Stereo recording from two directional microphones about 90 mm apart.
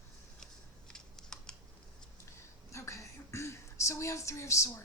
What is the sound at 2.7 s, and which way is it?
Speech, 35° left (ahead or behind).